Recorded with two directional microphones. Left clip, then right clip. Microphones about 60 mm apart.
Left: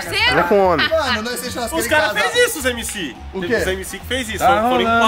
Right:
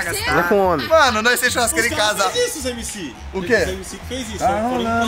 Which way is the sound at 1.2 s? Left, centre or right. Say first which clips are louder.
Right 8 dB; right.